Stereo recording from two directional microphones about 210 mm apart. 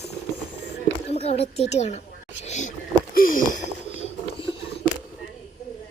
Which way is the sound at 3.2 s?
40° left (ahead or behind).